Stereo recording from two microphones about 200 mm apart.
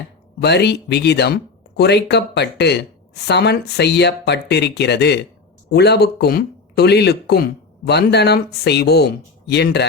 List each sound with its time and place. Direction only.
0.4 s speech: 55° left (ahead or behind)